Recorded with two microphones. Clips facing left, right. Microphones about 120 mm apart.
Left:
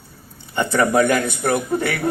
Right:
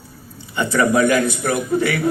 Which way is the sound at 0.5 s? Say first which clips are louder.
Even; 55° left (ahead or behind).